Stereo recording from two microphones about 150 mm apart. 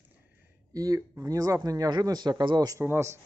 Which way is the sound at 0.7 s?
25° right (ahead or behind).